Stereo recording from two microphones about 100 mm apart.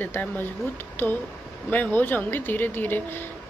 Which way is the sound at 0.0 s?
20° left (ahead or behind).